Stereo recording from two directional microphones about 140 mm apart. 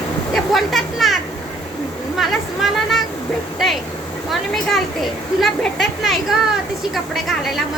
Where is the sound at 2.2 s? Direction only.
Centre (ahead or behind).